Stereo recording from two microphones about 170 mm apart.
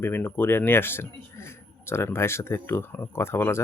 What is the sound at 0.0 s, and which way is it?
Speech, 10° left (ahead or behind).